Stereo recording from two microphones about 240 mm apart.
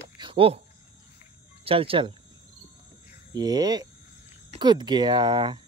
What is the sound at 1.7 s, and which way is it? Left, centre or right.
Speech, right.